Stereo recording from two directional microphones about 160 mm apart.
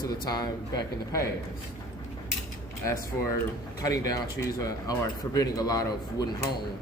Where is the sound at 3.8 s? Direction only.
20° left (ahead or behind).